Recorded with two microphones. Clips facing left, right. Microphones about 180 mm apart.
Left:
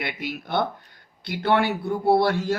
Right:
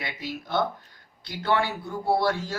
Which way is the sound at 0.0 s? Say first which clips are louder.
Left 3 dB; 60° left (ahead or behind).